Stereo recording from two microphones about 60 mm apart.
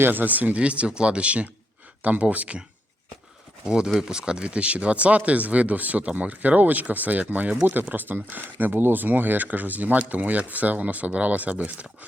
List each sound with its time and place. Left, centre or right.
0.0 s speech: right
3.7 s speech: centre